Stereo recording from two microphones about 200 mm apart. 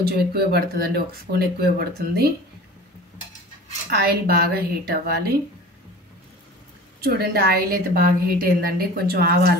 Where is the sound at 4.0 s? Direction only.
50° right (ahead or behind).